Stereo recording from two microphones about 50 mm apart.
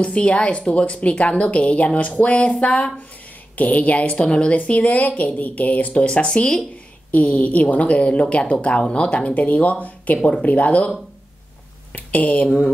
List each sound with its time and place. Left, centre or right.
0.0 s speech: left
6.0 s speech: centre
7.1 s speech: left
11.9 s speech: left